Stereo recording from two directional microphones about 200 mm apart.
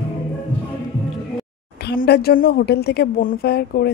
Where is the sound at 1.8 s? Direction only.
55° left (ahead or behind).